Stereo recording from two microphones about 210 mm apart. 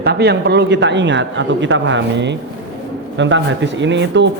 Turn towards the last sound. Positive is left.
turn(degrees=-60)  # may be behind; listen again after turning